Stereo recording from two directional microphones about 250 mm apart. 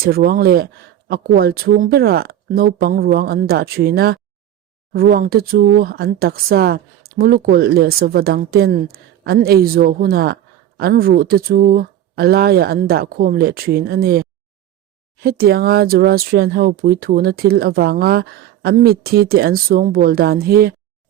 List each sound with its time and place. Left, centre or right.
0.0 s speech: right